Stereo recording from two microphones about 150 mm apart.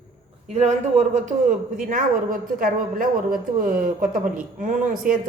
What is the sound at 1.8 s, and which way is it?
A woman's voice, 65° right (ahead or behind).